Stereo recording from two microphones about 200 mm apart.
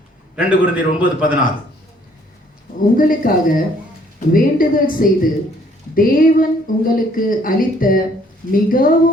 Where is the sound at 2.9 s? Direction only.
45° left (ahead or behind).